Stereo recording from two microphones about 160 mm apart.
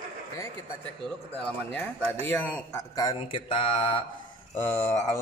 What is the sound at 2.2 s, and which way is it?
Speech, 10° left (ahead or behind).